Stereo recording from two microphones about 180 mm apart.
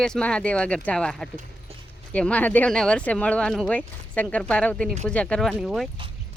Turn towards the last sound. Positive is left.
turn(degrees=0)  # may be behind; listen again after turning